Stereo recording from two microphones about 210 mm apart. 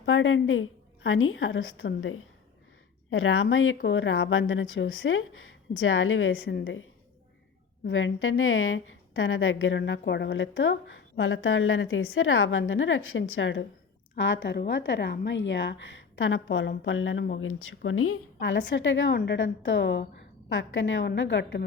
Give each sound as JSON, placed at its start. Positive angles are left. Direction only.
{"t": 0.0, "sound": "a woman's voice", "side_deg": 70}
{"t": 3.1, "sound": "a woman's voice", "side_deg": 80}
{"t": 3.8, "sound": "a woman's voice", "side_deg": 65}
{"t": 7.9, "sound": "a woman's voice", "side_deg": 65}
{"t": 11.2, "sound": "a woman's voice", "side_deg": 75}
{"t": 18.3, "sound": "a woman's voice", "side_deg": 60}